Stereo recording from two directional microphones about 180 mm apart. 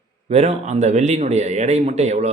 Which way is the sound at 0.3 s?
35° right (ahead or behind).